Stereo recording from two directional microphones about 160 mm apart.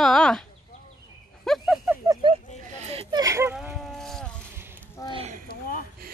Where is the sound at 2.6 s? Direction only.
45° right (ahead or behind).